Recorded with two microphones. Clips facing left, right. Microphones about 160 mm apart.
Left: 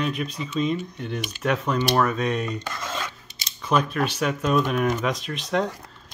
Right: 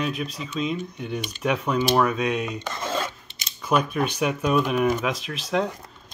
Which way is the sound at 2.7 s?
30° right (ahead or behind).